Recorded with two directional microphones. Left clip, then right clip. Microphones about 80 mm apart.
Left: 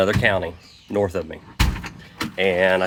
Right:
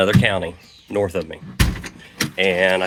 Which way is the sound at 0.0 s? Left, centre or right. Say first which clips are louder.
Right 1 dB; centre.